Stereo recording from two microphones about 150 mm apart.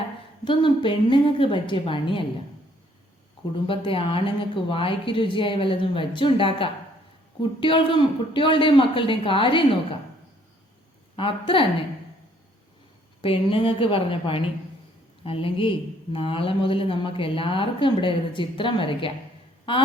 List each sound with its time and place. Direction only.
0.4 s speech: 35° left (ahead or behind)
3.7 s speech: 35° left (ahead or behind)
11.2 s speech: 35° left (ahead or behind)
13.2 s speech: 35° left (ahead or behind)